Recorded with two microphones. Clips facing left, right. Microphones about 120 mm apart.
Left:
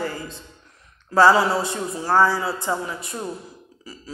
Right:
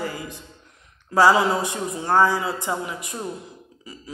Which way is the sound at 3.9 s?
20° right (ahead or behind).